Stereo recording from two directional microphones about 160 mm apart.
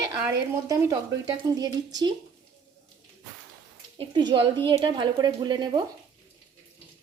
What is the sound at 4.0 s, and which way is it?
Speech, 30° right (ahead or behind).